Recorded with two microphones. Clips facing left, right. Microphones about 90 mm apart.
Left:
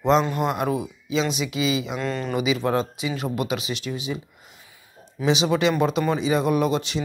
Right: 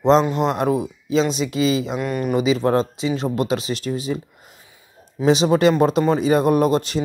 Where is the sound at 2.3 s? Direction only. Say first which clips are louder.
Right 5 dB; 35° right (ahead or behind).